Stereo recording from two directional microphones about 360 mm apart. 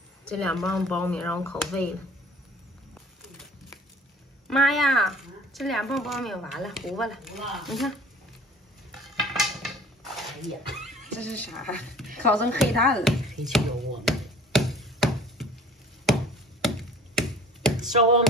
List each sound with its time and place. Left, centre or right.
0.3 s speech: centre
2.9 s music: centre
4.5 s speech: centre
9.0 s a sound: centre
10.7 s speech: centre
12.3 s chopping: centre
17.7 s a sound: centre